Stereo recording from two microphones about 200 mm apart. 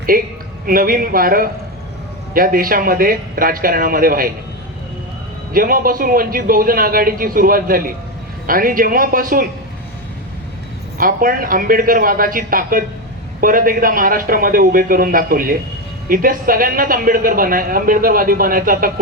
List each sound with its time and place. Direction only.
0.1 s speech: 45° right (ahead or behind)
5.5 s speech: 45° right (ahead or behind)
10.9 s speech: 45° right (ahead or behind)